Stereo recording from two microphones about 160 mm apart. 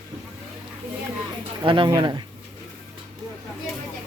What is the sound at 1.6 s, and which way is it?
Speech, 30° right (ahead or behind).